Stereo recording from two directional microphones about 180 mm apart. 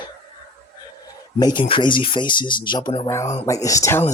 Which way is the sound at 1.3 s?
25° left (ahead or behind).